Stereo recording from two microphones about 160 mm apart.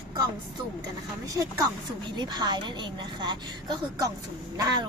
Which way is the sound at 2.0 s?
30° right (ahead or behind).